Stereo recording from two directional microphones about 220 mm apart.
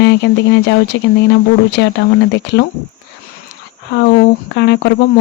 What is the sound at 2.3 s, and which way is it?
Speech, 50° left (ahead or behind).